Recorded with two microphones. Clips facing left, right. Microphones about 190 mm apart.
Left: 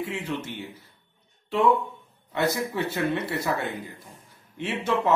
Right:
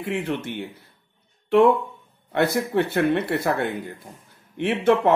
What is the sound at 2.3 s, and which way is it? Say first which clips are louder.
Speech: right 5 dB; 60° right (ahead or behind).